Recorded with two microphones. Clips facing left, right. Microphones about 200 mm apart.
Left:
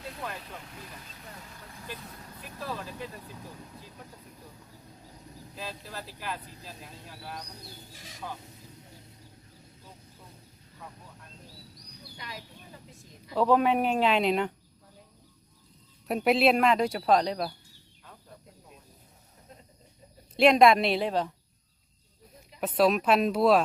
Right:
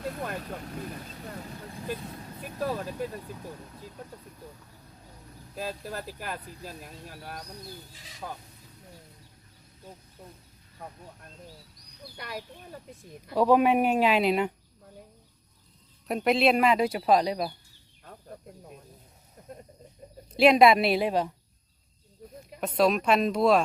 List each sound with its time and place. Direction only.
0.0 s speech: 45° right (ahead or behind)
2.4 s speech: 45° right (ahead or behind)
5.5 s speech: 50° right (ahead or behind)
12.1 s speech: 55° right (ahead or behind)
13.3 s speech: 10° right (ahead or behind)
16.0 s speech: centre (ahead or behind)
20.3 s speech: 5° right (ahead or behind)
22.6 s speech: 5° left (ahead or behind)